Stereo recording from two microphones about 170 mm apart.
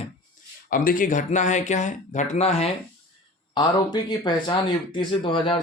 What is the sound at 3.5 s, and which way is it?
Speech, 25° left (ahead or behind).